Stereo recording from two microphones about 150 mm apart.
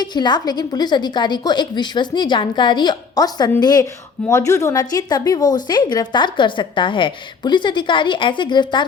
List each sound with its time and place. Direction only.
0.0 s a woman's voice: 30° left (ahead or behind)